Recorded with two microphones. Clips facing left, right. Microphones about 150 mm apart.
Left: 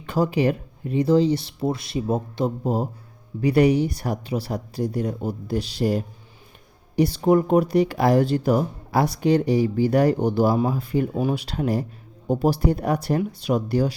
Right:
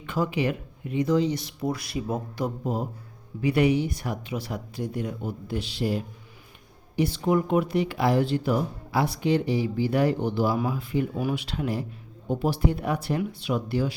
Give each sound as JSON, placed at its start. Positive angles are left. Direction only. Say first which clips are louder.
{"t": 0.0, "sound": "speech", "louder": "left 5 dB", "side_deg": 35}